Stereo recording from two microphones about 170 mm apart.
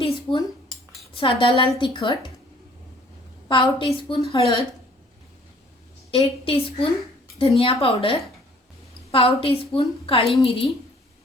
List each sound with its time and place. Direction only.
0.0 s dishes: 30° left (ahead or behind)
1.1 s a woman's voice: 30° left (ahead or behind)
3.5 s a woman's voice: 30° left (ahead or behind)
6.1 s a woman's voice: 35° left (ahead or behind)